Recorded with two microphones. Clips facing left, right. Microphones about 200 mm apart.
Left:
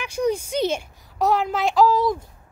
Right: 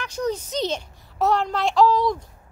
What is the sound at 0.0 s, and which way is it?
Speech, 10° left (ahead or behind).